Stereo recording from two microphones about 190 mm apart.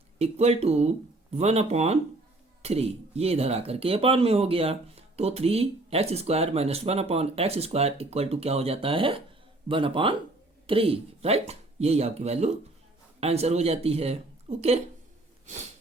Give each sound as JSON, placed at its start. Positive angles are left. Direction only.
{"t": 0.2, "sound": "speech", "side_deg": -35}